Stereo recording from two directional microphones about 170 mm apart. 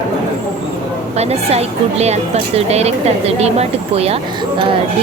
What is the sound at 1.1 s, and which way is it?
A woman's voice, 40° right (ahead or behind).